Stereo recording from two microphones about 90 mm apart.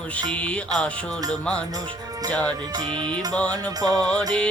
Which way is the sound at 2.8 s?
55° right (ahead or behind).